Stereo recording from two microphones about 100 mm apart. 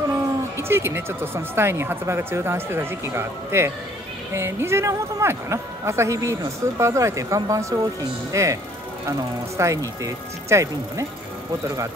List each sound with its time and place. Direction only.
0.1 s a woman's voice: 25° right (ahead or behind)
9.6 s a woman's voice: 30° right (ahead or behind)